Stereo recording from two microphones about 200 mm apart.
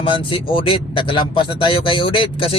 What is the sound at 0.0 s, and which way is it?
Speech, 25° left (ahead or behind).